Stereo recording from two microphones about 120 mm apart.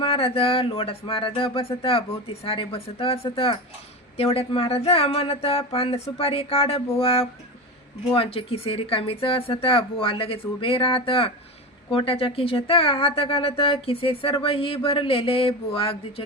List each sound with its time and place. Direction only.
0.0 s speech: 50° left (ahead or behind)
6.9 s a sound: 55° left (ahead or behind)
8.1 s speech: 50° left (ahead or behind)